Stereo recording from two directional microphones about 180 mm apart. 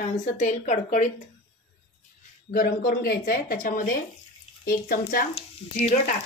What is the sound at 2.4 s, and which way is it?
Speech, 55° left (ahead or behind).